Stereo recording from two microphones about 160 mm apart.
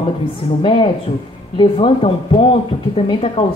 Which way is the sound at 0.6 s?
30° left (ahead or behind).